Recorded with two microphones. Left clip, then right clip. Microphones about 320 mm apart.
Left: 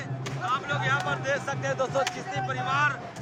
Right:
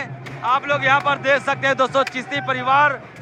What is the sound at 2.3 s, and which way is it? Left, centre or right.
Speech, centre.